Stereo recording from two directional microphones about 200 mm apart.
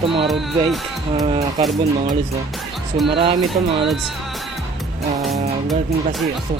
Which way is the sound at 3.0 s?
25° right (ahead or behind).